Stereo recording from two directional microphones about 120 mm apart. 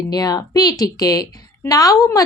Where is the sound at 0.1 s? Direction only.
30° left (ahead or behind).